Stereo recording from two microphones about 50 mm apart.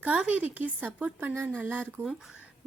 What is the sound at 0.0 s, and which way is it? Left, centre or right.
Speech, right.